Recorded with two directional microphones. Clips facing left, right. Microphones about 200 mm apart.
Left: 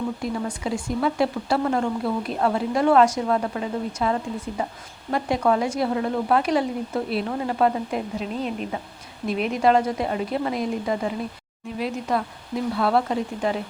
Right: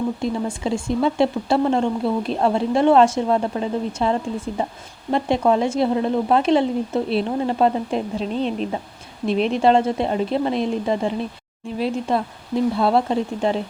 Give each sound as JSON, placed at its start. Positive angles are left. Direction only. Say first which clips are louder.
{"t": 0.2, "sound": "speech", "louder": "right 4 dB", "side_deg": -25}